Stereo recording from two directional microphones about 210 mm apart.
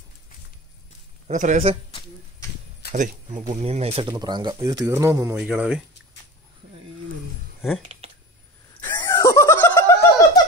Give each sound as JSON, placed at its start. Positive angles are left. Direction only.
{"t": 1.2, "sound": "a man's voice", "side_deg": -35}
{"t": 2.9, "sound": "speech", "side_deg": -30}
{"t": 5.5, "sound": "speech", "side_deg": 0}
{"t": 8.8, "sound": "a sound", "side_deg": 10}